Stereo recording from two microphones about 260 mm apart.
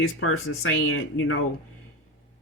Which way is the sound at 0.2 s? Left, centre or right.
Left.